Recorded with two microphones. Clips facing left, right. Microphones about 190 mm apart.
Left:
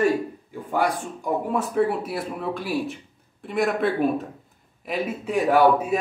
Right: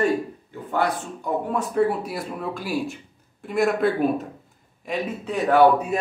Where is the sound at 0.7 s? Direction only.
10° left (ahead or behind).